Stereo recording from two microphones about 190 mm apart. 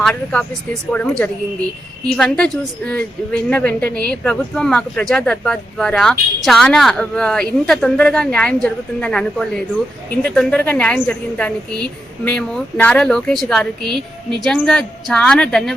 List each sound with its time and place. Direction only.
0.0 s a woman's voice: 5° left (ahead or behind)
2.0 s a woman's voice: 5° left (ahead or behind)